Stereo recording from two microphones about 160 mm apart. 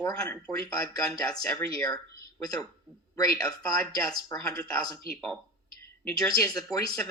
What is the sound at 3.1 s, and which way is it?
Speech, 20° left (ahead or behind).